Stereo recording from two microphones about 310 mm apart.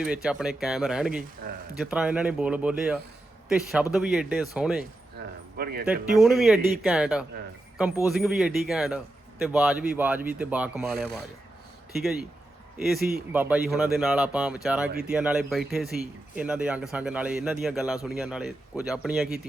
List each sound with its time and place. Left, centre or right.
0.0 s speech: centre
5.5 s speech: right
5.8 s speech: centre
12.7 s a man's voice: centre